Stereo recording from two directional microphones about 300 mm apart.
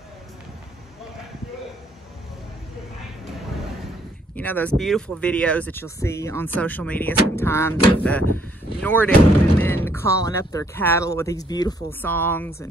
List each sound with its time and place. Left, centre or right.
4.4 s speech: centre